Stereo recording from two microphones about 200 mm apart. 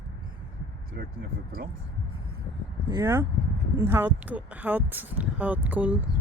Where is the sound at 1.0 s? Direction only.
55° right (ahead or behind).